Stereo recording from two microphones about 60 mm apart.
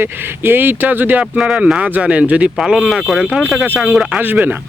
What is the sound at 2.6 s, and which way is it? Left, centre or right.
Speech, centre.